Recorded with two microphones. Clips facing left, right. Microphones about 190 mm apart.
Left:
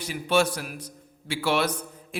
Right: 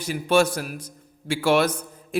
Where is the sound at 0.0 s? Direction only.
45° right (ahead or behind).